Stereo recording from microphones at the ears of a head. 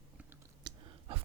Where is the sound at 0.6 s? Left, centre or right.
Right.